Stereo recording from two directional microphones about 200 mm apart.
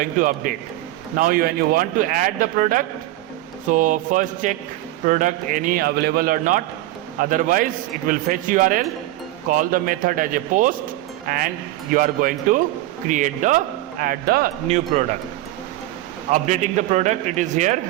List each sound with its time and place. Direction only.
0.0 s a man's voice: 40° right (ahead or behind)
16.3 s a man's voice: 35° right (ahead or behind)